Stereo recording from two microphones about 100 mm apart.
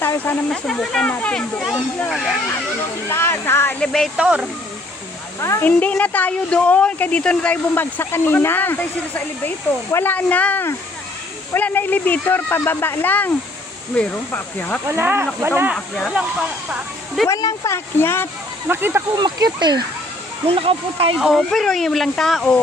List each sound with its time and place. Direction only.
0.0 s snake: 20° left (ahead or behind)
0.5 s speech: 5° left (ahead or behind)
3.1 s speech: 25° left (ahead or behind)
3.8 s speech: 5° left (ahead or behind)
4.2 s speech: 10° right (ahead or behind)
5.4 s speech: 30° left (ahead or behind)
5.6 s speech: 15° left (ahead or behind)
14.8 s speech: 25° right (ahead or behind)
17.2 s speech: 40° left (ahead or behind)
17.7 s speech: 25° left (ahead or behind)
18.7 s speech: 20° right (ahead or behind)
19.2 s speech: 45° right (ahead or behind)
20.5 s speech: 70° right (ahead or behind)
21.2 s speech: centre (ahead or behind)